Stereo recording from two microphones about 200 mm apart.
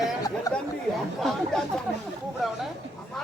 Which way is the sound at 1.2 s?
Centre (ahead or behind).